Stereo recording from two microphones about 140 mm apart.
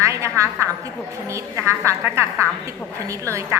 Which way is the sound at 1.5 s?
20° right (ahead or behind).